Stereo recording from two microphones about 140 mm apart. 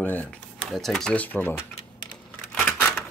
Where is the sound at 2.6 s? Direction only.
10° left (ahead or behind).